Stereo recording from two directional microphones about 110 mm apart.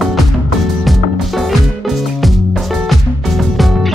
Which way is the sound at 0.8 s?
Centre (ahead or behind).